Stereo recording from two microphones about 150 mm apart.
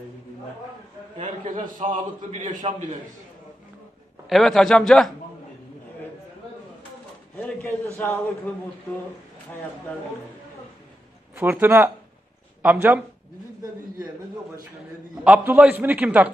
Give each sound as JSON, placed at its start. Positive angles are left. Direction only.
{"t": 1.8, "sound": "a man's voice", "side_deg": -45}
{"t": 2.5, "sound": "a man's voice", "side_deg": -30}
{"t": 4.3, "sound": "a man's voice", "side_deg": 0}
{"t": 7.3, "sound": "a man's voice", "side_deg": 10}
{"t": 11.3, "sound": "a man's voice", "side_deg": -15}
{"t": 15.1, "sound": "a man's voice", "side_deg": -5}